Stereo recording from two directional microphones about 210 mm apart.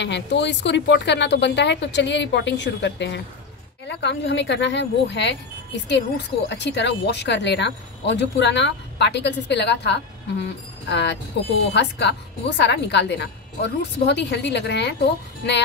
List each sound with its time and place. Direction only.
0.0 s speech: 55° left (ahead or behind)